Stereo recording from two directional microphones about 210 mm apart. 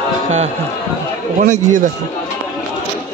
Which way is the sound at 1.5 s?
35° right (ahead or behind).